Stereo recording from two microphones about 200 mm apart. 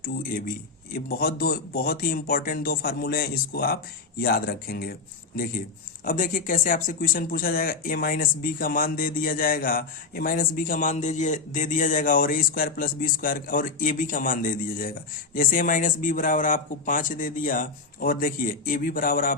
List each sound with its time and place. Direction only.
0.0 s speech: 45° left (ahead or behind)
6.1 s speech: 45° left (ahead or behind)